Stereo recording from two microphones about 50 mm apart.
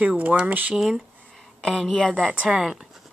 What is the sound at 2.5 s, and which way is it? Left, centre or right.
Speech, centre.